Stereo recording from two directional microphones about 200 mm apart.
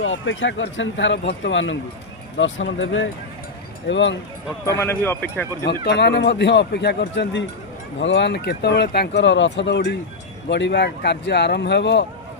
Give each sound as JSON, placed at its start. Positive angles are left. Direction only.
{"t": 0.0, "sound": "speech", "side_deg": 75}
{"t": 4.8, "sound": "speech", "side_deg": 10}
{"t": 5.6, "sound": "speech", "side_deg": 60}